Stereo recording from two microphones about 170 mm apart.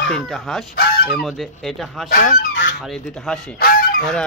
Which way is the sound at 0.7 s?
65° left (ahead or behind).